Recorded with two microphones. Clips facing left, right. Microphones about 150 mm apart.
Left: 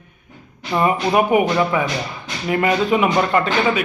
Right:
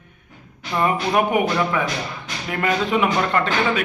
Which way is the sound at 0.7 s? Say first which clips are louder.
Left 3 dB; 20° left (ahead or behind).